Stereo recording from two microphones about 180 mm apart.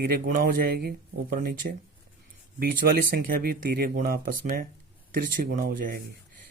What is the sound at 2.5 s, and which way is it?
Speech, 55° right (ahead or behind).